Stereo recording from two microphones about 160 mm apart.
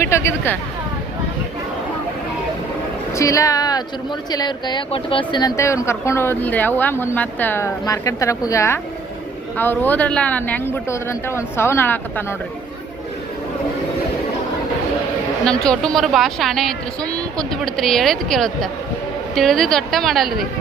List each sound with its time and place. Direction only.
0.0 s speech: 15° left (ahead or behind)
3.2 s speech: 20° left (ahead or behind)
15.4 s a woman's voice: 5° left (ahead or behind)